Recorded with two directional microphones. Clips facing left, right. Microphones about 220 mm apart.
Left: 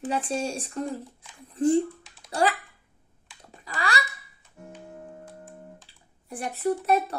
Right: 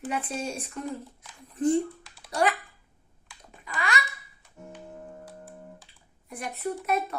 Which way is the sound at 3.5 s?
35° left (ahead or behind).